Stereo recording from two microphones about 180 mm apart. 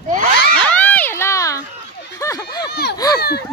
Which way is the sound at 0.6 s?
10° left (ahead or behind).